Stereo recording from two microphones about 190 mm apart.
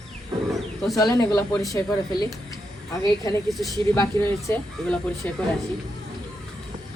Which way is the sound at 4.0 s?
15° left (ahead or behind).